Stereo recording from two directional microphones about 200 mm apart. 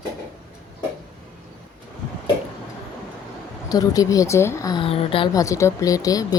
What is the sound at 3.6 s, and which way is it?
Speech, 20° left (ahead or behind).